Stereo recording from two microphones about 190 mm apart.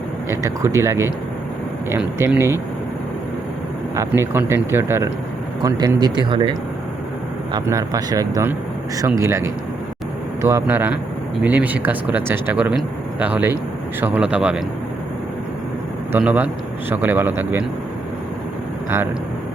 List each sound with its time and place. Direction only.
0.3 s speech: 15° right (ahead or behind)
3.9 s speech: 15° right (ahead or behind)
16.1 s speech: 10° right (ahead or behind)